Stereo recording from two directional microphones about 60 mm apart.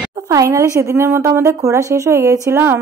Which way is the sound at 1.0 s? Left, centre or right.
Right.